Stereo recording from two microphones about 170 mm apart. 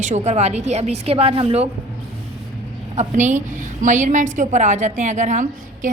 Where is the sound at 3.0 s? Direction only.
45° right (ahead or behind).